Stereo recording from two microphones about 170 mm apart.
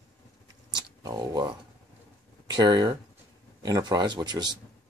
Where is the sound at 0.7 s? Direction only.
25° right (ahead or behind).